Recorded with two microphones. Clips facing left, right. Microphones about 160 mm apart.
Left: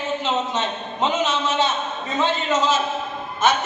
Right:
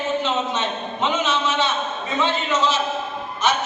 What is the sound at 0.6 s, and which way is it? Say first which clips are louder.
A man's voice: left 1 dB; 40° left (ahead or behind).